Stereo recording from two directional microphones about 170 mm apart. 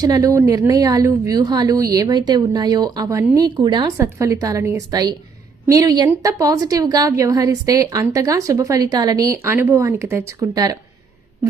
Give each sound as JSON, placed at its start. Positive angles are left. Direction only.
{"t": 0.0, "sound": "a woman's voice", "side_deg": -20}